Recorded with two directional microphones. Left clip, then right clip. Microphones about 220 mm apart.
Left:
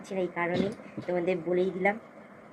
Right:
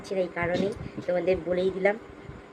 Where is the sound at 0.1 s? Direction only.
15° right (ahead or behind).